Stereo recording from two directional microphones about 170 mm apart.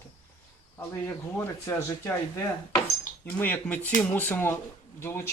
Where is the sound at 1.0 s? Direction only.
15° left (ahead or behind).